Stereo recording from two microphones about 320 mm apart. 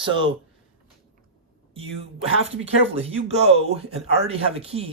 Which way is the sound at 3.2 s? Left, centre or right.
Centre.